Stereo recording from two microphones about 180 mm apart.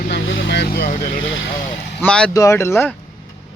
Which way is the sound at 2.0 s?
5° left (ahead or behind).